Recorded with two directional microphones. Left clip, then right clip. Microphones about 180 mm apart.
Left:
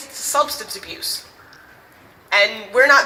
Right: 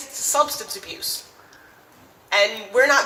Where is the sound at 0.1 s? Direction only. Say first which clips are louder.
Left 1 dB; 15° right (ahead or behind).